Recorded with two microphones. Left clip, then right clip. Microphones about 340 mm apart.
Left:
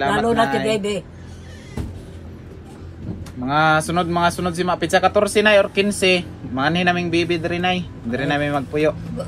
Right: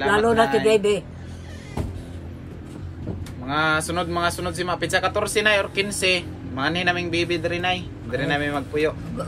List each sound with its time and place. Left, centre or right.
0.0 s speech: centre
0.7 s a man's voice: centre
3.4 s speech: centre